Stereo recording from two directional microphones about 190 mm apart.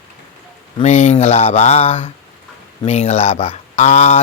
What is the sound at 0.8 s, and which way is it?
Speech, 35° left (ahead or behind).